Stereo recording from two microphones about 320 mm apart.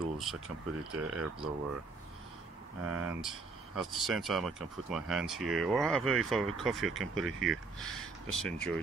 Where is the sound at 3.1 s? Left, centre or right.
Centre.